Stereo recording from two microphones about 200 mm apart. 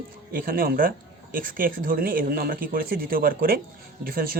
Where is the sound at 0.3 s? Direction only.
45° right (ahead or behind).